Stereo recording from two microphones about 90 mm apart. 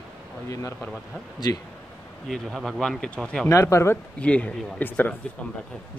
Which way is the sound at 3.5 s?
30° left (ahead or behind).